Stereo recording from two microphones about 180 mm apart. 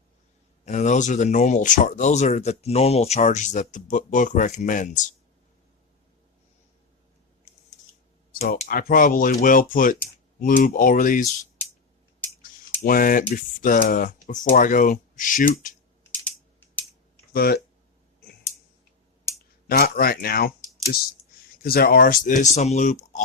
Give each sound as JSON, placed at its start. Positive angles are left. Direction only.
{"t": 0.6, "sound": "speech", "side_deg": 40}
{"t": 8.6, "sound": "speech", "side_deg": 55}
{"t": 12.4, "sound": "speech", "side_deg": 50}
{"t": 17.3, "sound": "speech", "side_deg": 60}
{"t": 19.6, "sound": "speech", "side_deg": 55}
{"t": 21.6, "sound": "speech", "side_deg": 55}